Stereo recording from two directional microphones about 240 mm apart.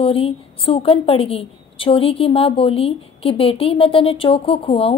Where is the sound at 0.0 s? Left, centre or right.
Left.